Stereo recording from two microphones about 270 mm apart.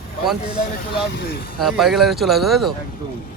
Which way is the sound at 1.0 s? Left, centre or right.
Left.